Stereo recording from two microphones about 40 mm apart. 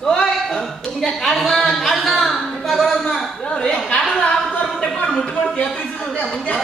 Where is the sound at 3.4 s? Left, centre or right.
Left.